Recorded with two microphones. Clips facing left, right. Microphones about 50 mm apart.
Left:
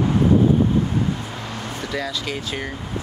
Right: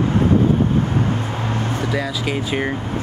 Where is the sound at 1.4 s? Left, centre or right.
Right.